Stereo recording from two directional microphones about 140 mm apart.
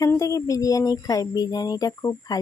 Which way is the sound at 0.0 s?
20° left (ahead or behind).